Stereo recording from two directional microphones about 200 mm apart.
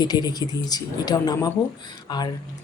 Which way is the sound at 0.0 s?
20° left (ahead or behind).